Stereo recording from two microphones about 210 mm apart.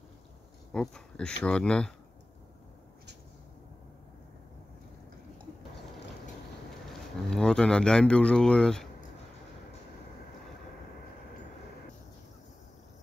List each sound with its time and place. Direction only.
0.7 s speech: 5° left (ahead or behind)
6.9 s speech: 5° left (ahead or behind)